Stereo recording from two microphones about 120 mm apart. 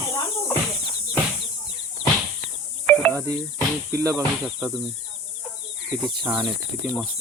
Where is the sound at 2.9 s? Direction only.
10° left (ahead or behind).